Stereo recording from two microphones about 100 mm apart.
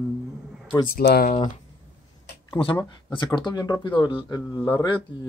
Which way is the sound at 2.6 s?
55° left (ahead or behind).